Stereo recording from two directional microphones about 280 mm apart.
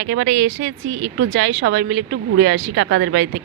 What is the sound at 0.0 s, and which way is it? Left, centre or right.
Speech, right.